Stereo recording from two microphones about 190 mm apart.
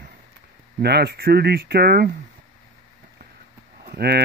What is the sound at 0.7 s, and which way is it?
Speech, 60° right (ahead or behind).